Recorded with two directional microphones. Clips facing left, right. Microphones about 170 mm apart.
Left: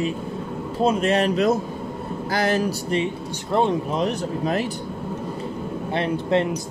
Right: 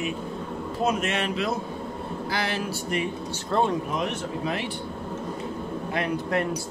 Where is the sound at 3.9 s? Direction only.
35° left (ahead or behind).